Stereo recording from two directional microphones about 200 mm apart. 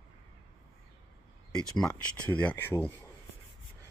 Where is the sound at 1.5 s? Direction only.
5° left (ahead or behind).